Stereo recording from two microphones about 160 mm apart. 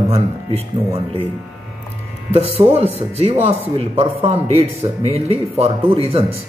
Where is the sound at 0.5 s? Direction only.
35° right (ahead or behind).